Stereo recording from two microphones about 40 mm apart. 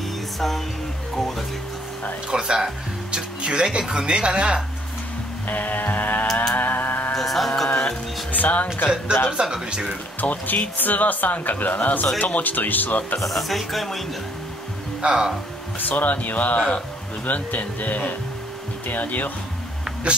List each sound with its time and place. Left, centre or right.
1.1 s music: centre
2.2 s speech: centre
3.4 s a woman's voice: right
5.5 s speech: left
6.5 s a sound: left
7.2 s music: centre
8.3 s music: left
9.3 s a woman's voice: right
10.2 s speech: left
13.3 s speech: centre
15.0 s speech: right
15.9 s speech: left
20.1 s a woman's voice: right